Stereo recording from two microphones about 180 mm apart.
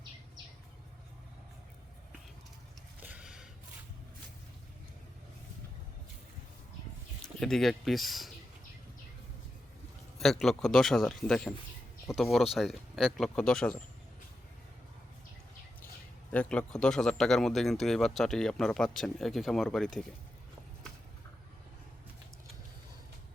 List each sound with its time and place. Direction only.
3.0 s a sound: 10° right (ahead or behind)
7.3 s a man's voice: centre (ahead or behind)
10.2 s a man's voice: centre (ahead or behind)
16.3 s a man's voice: 5° left (ahead or behind)